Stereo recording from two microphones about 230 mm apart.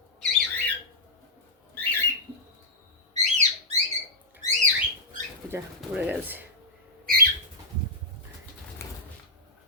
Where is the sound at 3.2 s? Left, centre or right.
Right.